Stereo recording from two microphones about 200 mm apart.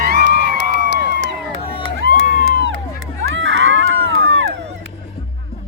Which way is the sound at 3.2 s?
75° right (ahead or behind).